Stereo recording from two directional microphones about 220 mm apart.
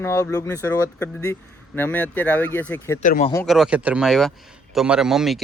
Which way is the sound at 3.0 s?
35° left (ahead or behind).